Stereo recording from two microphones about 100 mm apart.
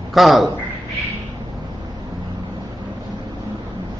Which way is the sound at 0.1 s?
Centre (ahead or behind).